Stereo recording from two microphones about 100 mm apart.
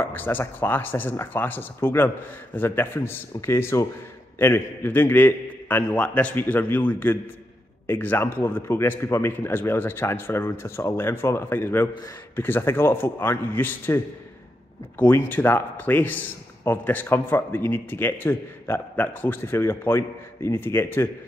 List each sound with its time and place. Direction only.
0.0 s a man's voice: 20° left (ahead or behind)